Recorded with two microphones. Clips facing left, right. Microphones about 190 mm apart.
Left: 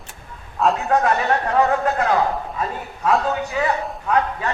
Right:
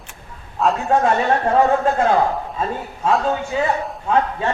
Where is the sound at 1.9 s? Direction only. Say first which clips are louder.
Right 3 dB; 25° right (ahead or behind).